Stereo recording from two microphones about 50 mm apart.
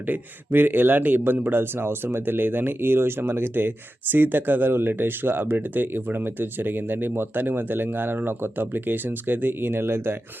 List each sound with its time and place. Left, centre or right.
0.1 s speech: right